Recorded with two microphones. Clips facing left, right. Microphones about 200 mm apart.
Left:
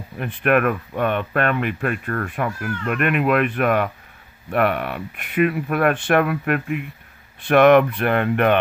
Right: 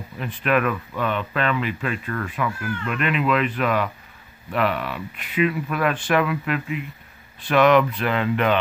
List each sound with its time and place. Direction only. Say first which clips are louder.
0.2 s speech: left 3 dB; 55° left (ahead or behind)